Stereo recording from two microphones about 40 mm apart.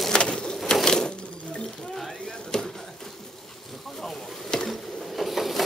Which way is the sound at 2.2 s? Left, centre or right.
Centre.